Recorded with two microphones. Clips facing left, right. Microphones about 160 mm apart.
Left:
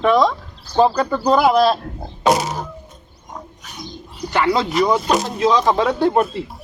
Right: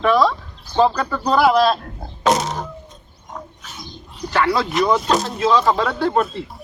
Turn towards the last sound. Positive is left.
turn(degrees=15)  # may be behind; listen again after turning